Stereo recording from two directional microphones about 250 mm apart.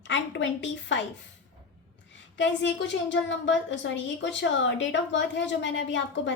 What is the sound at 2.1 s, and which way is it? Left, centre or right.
A woman's voice, left.